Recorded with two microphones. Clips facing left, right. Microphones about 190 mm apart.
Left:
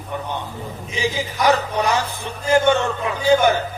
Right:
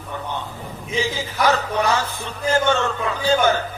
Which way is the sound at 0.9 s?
15° left (ahead or behind).